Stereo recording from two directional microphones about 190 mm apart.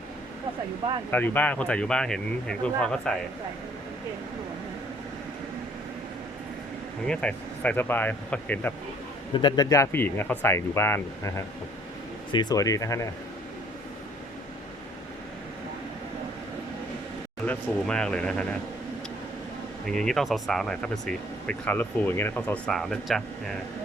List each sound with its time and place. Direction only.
1.1 s speech: 10° left (ahead or behind)
7.1 s speech: 5° left (ahead or behind)
9.3 s speech: 25° left (ahead or behind)
17.4 s speech: 5° left (ahead or behind)
19.9 s speech: 5° left (ahead or behind)